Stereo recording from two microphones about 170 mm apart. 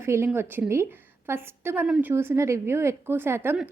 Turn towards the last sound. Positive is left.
turn(degrees=-10)  # may be behind; listen again after turning